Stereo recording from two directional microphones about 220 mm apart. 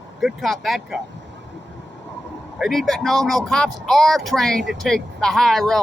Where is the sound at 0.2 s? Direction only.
Centre (ahead or behind).